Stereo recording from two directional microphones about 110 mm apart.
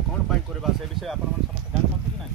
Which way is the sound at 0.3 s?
Centre (ahead or behind).